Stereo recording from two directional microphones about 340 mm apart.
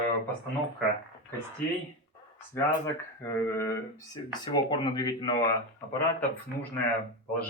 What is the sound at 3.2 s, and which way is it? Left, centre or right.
Speech, centre.